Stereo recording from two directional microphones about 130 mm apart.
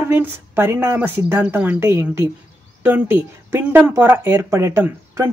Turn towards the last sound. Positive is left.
turn(degrees=-20)  # may be behind; listen again after turning